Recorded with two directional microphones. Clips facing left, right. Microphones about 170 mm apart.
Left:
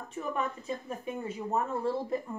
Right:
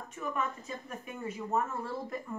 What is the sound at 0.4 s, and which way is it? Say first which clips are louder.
Speech: left 3 dB; 30° left (ahead or behind).